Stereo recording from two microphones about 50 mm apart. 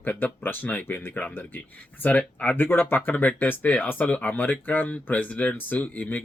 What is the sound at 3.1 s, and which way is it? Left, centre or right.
Speech, left.